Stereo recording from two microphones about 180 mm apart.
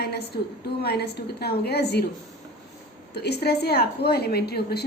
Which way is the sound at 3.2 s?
65° left (ahead or behind).